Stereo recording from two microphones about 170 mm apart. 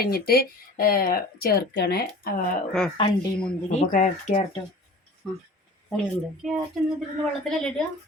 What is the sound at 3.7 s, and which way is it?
Speech, 45° left (ahead or behind).